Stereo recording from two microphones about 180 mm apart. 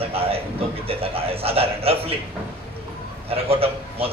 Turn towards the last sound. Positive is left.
turn(degrees=-30)  # may be behind; listen again after turning